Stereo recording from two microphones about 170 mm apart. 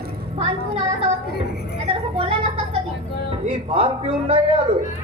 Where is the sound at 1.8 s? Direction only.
35° right (ahead or behind).